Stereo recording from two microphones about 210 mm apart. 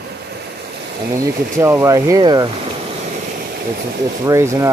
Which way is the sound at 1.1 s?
15° right (ahead or behind).